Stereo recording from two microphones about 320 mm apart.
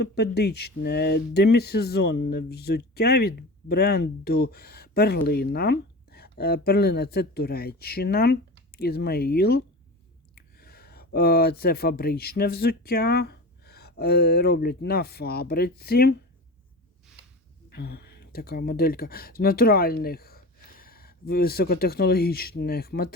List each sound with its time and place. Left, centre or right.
0.0 s speech: left
17.7 s speech: left